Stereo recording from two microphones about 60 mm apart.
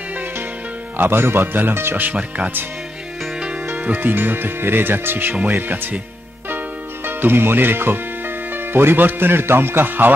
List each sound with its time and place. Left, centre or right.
0.9 s speech: right
3.7 s speech: right
7.1 s speech: right